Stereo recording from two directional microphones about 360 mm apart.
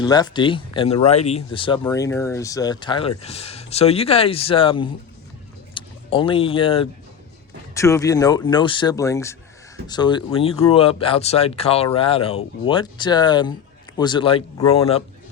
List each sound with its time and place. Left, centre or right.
0.0 s speech: centre